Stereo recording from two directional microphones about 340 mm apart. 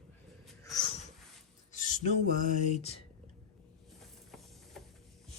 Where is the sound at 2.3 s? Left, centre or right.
Right.